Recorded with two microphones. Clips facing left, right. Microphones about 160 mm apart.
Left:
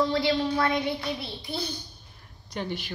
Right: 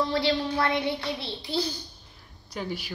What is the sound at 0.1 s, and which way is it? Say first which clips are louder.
Speech: left 1 dB; 15° left (ahead or behind).